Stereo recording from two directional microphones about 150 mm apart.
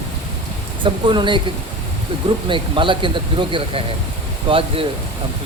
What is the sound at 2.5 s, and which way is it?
Speech, 35° right (ahead or behind).